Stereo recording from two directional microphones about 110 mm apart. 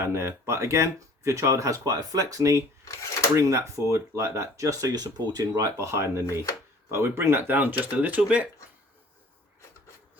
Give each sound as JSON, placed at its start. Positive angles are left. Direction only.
{"t": 0.0, "sound": "speech", "side_deg": -25}